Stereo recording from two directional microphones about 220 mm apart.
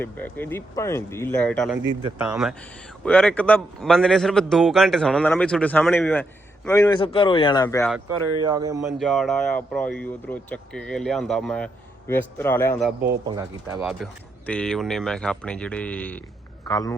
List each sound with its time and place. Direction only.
0.0 s speech: 10° left (ahead or behind)
1.9 s speech: 20° right (ahead or behind)
2.1 s speech: 5° right (ahead or behind)
3.0 s a man's voice: 5° left (ahead or behind)
8.4 s speech: 15° right (ahead or behind)
9.0 s speech: centre (ahead or behind)
13.2 s speech: 15° right (ahead or behind)
13.8 s speech: 5° left (ahead or behind)